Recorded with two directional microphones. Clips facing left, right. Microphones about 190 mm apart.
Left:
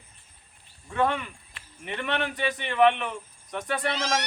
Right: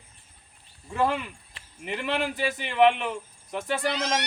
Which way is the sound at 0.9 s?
5° right (ahead or behind).